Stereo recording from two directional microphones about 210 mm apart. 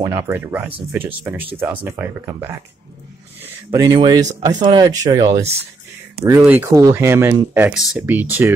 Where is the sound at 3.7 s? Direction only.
15° right (ahead or behind).